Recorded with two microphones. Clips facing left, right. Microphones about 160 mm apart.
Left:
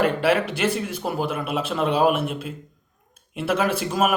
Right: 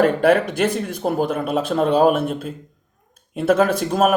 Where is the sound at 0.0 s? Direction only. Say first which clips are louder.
Right 5 dB; 40° right (ahead or behind).